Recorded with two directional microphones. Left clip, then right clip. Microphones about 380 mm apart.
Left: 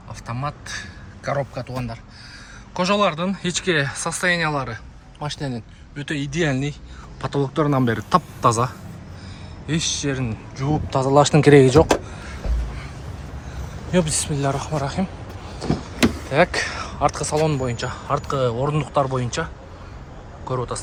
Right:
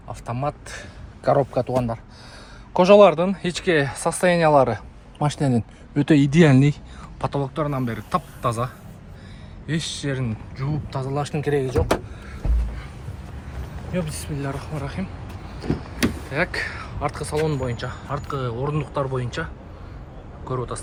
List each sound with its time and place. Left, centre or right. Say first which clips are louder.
0.1 s a man's voice: right 2 dB; centre
7.2 s speech: left 3 dB; centre
13.9 s speech: left 8 dB; centre
20.5 s speech: left 3 dB; centre